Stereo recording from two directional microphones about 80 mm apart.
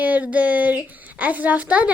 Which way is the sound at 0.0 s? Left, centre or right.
Centre.